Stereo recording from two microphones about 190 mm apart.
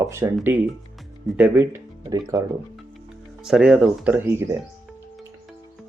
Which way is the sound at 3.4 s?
5° right (ahead or behind).